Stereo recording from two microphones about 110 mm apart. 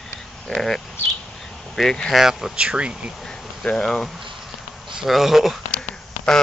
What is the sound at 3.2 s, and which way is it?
Speech, 5° left (ahead or behind).